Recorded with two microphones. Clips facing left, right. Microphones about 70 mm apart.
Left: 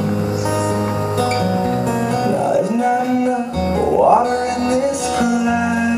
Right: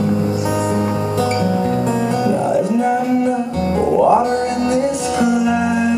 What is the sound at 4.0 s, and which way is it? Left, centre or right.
Music, centre.